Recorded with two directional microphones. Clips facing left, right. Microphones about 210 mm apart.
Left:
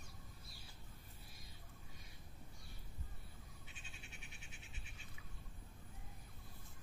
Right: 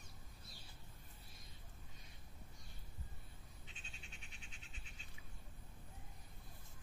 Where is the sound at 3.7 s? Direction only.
10° left (ahead or behind).